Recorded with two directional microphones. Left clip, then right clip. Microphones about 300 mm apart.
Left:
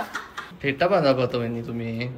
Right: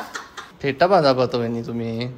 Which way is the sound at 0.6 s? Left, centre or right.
Centre.